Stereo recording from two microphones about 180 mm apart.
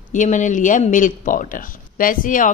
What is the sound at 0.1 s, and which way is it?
Speech, 45° left (ahead or behind).